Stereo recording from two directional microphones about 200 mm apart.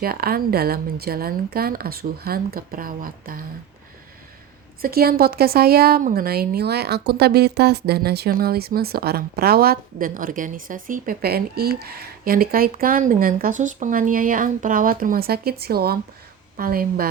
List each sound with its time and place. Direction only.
0.0 s speech: 50° right (ahead or behind)
4.8 s speech: 50° right (ahead or behind)